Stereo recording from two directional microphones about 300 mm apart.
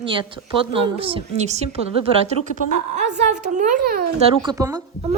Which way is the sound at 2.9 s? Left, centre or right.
Right.